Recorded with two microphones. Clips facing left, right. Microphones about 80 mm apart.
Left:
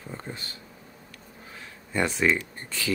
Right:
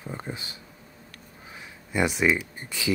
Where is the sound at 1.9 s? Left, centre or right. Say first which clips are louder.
Right 1 dB; centre.